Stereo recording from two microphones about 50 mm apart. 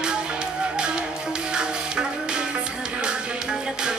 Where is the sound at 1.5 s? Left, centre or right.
Centre.